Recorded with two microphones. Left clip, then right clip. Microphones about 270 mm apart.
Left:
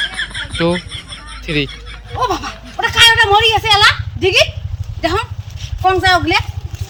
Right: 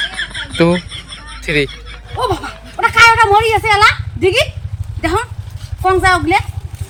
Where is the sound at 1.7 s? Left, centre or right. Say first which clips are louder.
Right 1 dB; centre.